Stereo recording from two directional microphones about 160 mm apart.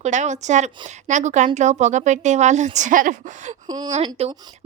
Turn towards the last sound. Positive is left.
turn(degrees=-40)  # may be behind; listen again after turning